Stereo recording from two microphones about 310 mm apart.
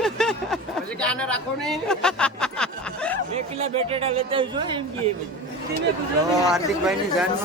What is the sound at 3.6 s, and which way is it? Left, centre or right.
Speech, centre.